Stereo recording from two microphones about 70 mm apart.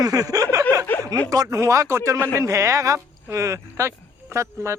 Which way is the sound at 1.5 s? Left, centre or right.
Right.